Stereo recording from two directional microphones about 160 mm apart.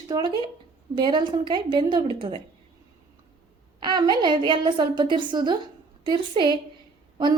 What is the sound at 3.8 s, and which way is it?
Speech, 25° right (ahead or behind).